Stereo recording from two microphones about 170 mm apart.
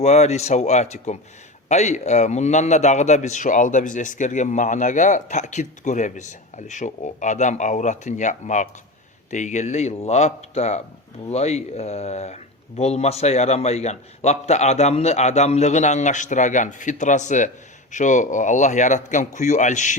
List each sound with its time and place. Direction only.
0.0 s a man's voice: 40° left (ahead or behind)